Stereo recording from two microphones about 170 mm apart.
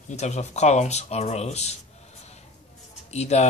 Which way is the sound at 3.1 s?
40° left (ahead or behind).